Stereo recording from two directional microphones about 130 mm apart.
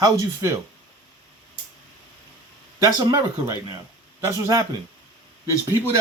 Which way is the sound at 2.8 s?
25° right (ahead or behind).